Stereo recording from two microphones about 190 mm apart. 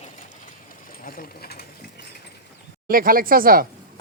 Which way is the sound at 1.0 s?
50° left (ahead or behind).